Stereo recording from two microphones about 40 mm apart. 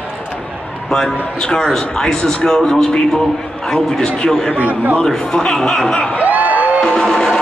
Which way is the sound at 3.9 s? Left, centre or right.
Centre.